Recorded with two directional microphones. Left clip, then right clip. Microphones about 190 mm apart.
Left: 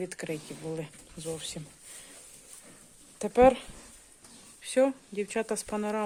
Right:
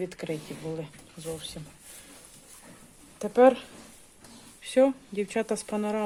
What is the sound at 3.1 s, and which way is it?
Speech, 20° left (ahead or behind).